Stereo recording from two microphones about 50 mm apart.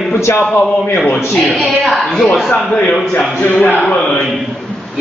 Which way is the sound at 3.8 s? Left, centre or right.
Centre.